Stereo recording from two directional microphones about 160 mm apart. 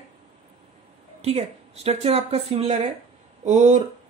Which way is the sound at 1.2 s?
40° right (ahead or behind).